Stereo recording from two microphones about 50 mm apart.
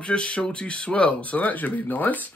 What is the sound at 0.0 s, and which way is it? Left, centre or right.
Speech, left.